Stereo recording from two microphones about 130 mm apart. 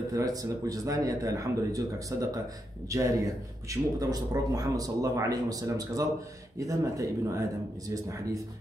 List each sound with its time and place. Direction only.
0.1 s a man's voice: 25° right (ahead or behind)